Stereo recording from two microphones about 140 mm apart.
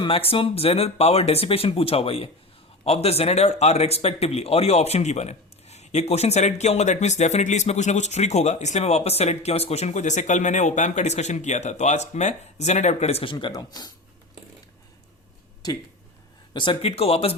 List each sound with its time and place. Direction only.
0.0 s speech: 40° left (ahead or behind)
13.3 s speech: 30° left (ahead or behind)
16.6 s speech: 40° left (ahead or behind)